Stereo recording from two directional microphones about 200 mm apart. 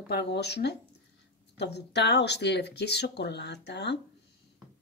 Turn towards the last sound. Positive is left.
turn(degrees=60)  # may be behind; listen again after turning